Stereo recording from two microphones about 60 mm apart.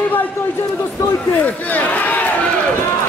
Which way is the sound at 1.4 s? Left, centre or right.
Left.